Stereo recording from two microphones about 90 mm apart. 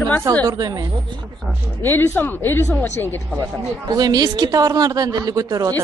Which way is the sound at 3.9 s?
45° right (ahead or behind).